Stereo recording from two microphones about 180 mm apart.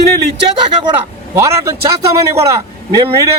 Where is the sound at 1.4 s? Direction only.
15° right (ahead or behind).